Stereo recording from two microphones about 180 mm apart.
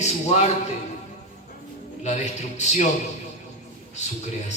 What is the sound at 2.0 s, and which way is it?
Speech, 40° left (ahead or behind).